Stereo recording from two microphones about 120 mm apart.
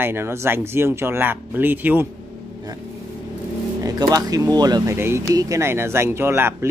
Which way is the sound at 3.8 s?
35° right (ahead or behind).